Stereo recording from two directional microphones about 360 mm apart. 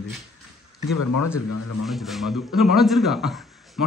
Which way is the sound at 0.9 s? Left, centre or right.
Left.